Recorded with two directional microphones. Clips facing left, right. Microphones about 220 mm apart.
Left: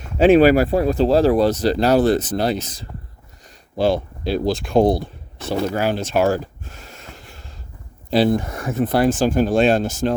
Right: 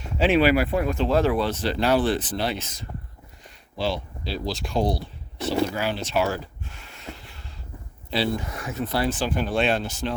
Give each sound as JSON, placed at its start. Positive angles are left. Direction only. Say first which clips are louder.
{"t": 0.0, "sound": "speech", "louder": "left 8 dB", "side_deg": 45}
{"t": 3.8, "sound": "speech", "louder": "left 9 dB", "side_deg": 50}
{"t": 5.5, "sound": "a sound", "louder": "left 4 dB", "side_deg": 45}
{"t": 8.1, "sound": "speech", "louder": "left 9 dB", "side_deg": 45}